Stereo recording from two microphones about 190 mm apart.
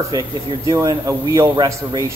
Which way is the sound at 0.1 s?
20° right (ahead or behind).